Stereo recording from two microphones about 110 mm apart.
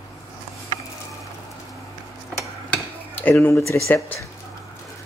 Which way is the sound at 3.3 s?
25° left (ahead or behind).